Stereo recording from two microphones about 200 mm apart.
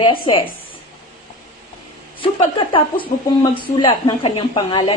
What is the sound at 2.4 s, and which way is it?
A woman's voice, 25° left (ahead or behind).